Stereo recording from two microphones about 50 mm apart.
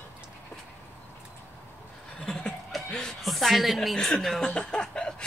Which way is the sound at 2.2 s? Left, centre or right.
Centre.